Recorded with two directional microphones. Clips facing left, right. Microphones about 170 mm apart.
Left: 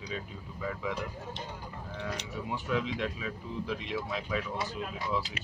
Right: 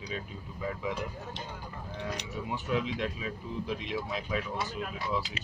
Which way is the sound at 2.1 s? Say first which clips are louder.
Even; 15° right (ahead or behind).